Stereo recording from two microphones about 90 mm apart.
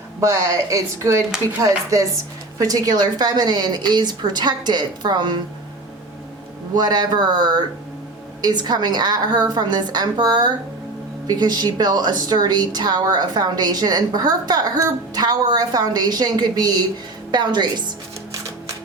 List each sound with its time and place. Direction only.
0.2 s a woman's voice: 35° right (ahead or behind); by 5.4 s 50° right (ahead or behind)
6.7 s a woman's voice: 50° right (ahead or behind)